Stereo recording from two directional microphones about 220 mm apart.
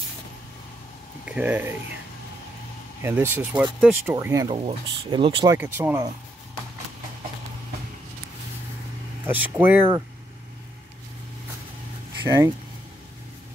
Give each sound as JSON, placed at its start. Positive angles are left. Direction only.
{"t": 1.2, "sound": "speech", "side_deg": -5}
{"t": 3.0, "sound": "speech", "side_deg": -10}
{"t": 4.6, "sound": "speech", "side_deg": -25}
{"t": 9.2, "sound": "speech", "side_deg": -10}
{"t": 12.2, "sound": "speech", "side_deg": -15}